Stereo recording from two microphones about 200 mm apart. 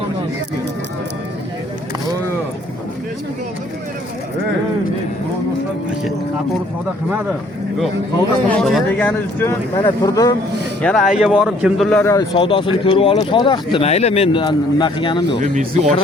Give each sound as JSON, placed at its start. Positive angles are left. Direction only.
{"t": 8.4, "sound": "speech", "side_deg": 5}
{"t": 10.8, "sound": "speech", "side_deg": 0}
{"t": 12.1, "sound": "speech", "side_deg": 25}
{"t": 15.4, "sound": "speech", "side_deg": -35}